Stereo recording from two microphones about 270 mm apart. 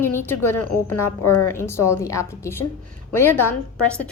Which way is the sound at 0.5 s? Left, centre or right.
Left.